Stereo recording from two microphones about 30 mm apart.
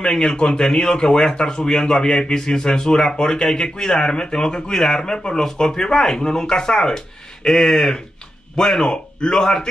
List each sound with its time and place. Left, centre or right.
0.0 s a man's voice: centre